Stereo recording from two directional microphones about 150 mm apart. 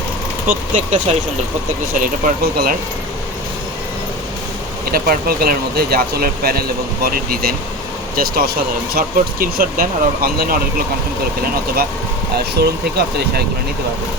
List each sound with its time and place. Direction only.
0.4 s speech: 60° right (ahead or behind)
2.0 s speech: 85° right
4.9 s speech: 80° right
12.6 s speech: 90° right